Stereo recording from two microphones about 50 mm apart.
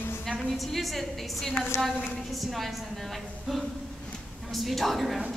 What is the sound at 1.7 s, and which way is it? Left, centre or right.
Speech, left.